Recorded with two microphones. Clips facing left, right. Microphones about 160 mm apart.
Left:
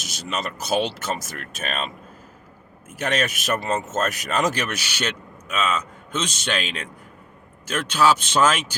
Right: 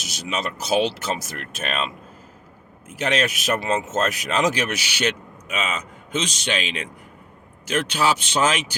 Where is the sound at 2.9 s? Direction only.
50° left (ahead or behind).